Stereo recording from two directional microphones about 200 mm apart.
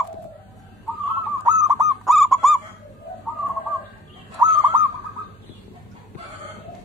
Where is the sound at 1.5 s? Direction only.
20° right (ahead or behind).